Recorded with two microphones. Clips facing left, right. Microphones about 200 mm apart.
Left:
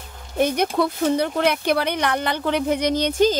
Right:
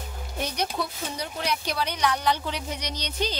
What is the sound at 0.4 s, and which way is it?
Speech, 55° left (ahead or behind).